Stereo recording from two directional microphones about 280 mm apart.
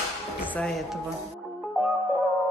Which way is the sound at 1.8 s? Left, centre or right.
Centre.